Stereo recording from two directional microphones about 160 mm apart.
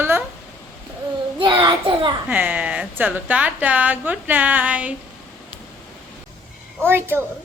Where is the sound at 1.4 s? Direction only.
30° right (ahead or behind).